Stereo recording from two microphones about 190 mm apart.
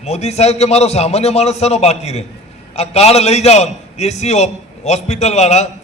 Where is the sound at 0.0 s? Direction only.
35° left (ahead or behind).